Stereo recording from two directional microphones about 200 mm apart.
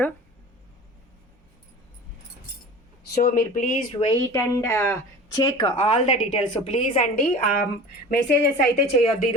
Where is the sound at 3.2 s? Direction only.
45° left (ahead or behind).